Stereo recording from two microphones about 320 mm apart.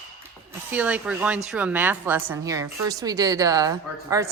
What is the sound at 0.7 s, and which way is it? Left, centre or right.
A woman's voice, centre.